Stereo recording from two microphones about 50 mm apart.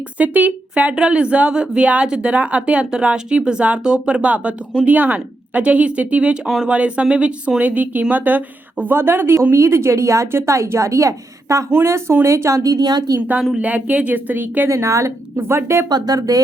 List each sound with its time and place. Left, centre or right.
0.2 s speech: right
4.9 s speech: right
7.6 s speech: right
9.0 s a woman's voice: right
11.7 s a woman's voice: right
12.2 s speech: right
13.6 s speech: right
14.7 s speech: right
15.4 s a woman's voice: right